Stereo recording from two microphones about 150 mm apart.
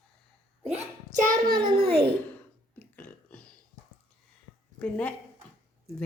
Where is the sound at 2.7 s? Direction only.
10° left (ahead or behind).